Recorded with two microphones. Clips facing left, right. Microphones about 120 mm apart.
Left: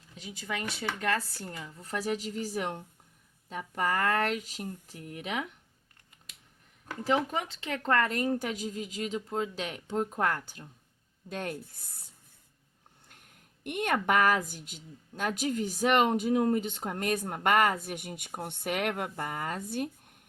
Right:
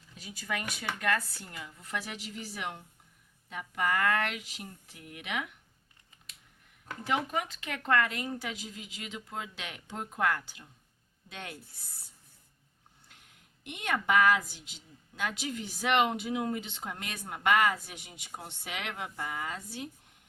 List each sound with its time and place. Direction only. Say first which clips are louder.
0.2 s a woman's voice: left 1 dB; 20° left (ahead or behind)
7.0 s a woman's voice: left 3 dB; 30° left (ahead or behind); by 11.5 s 45° left (ahead or behind)
13.7 s a woman's voice: left 3 dB; 55° left (ahead or behind)